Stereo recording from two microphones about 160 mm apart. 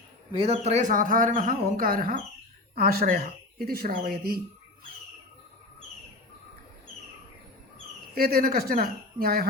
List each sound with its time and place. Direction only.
0.5 s speech: 45° right (ahead or behind); by 4.4 s 70° right (ahead or behind)
8.1 s speech: 70° right (ahead or behind)